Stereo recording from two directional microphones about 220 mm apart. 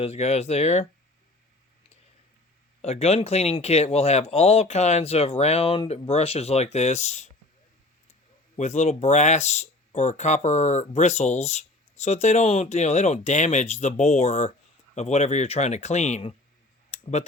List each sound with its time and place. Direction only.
0.0 s speech: 30° left (ahead or behind)
2.8 s speech: 30° left (ahead or behind)
8.5 s speech: 30° left (ahead or behind)
16.9 s a sound: 30° left (ahead or behind)